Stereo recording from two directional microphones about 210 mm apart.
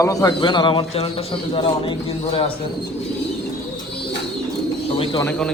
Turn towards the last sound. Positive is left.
turn(degrees=5)  # may be behind; listen again after turning